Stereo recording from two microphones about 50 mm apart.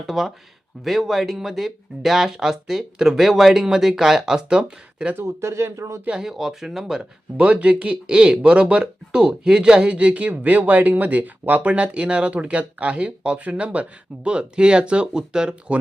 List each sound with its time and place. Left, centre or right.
0.1 s speech: centre
4.4 s speech: centre
5.2 s speech: right
6.1 s speech: centre; by 11.7 s right
11.7 s speech: right